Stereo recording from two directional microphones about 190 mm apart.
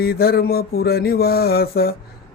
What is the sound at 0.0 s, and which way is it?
Mantra, 55° left (ahead or behind).